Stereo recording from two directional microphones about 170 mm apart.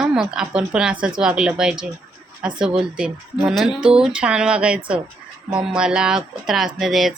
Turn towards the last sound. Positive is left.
turn(degrees=0)  # may be behind; listen again after turning